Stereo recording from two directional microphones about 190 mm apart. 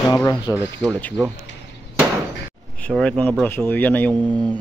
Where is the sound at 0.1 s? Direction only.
15° left (ahead or behind).